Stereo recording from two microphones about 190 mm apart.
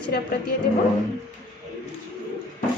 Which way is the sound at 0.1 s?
50° left (ahead or behind).